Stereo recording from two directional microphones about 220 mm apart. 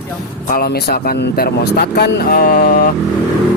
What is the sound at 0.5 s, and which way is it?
Speech, 45° left (ahead or behind).